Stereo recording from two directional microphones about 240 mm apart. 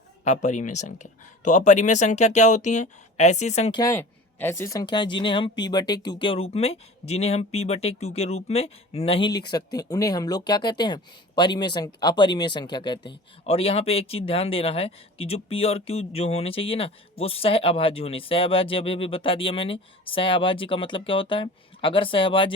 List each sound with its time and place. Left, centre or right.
0.3 s speech: left